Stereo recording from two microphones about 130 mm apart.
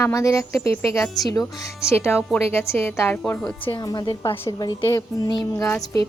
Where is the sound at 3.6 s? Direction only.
35° left (ahead or behind).